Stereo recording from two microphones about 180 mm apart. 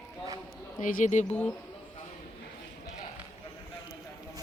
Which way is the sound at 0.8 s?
45° left (ahead or behind).